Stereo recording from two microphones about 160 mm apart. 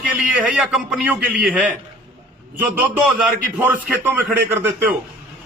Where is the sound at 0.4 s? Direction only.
5° right (ahead or behind).